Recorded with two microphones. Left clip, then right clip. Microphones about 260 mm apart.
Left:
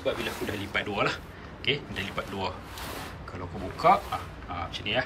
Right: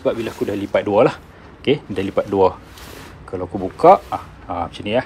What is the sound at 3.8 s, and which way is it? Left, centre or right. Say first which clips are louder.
Speech: right 11 dB; centre.